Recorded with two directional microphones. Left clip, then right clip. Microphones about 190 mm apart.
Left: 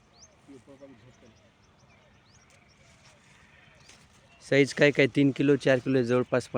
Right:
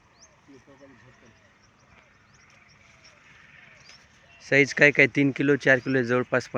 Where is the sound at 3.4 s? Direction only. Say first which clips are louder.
Right 8 dB; 70° left (ahead or behind).